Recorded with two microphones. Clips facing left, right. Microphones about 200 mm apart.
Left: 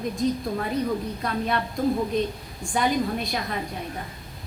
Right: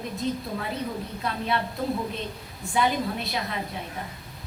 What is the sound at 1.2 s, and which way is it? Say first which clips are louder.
Speech: left 1 dB; 45° left (ahead or behind).